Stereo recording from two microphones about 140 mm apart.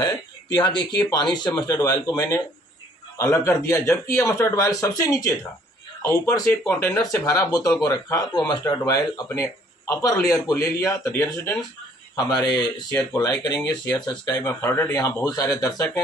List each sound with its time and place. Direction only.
0.0 s speech: 30° left (ahead or behind)